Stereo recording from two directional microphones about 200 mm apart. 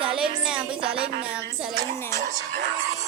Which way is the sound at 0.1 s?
5° right (ahead or behind).